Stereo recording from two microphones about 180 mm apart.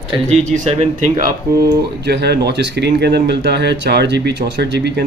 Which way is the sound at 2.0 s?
65° right (ahead or behind).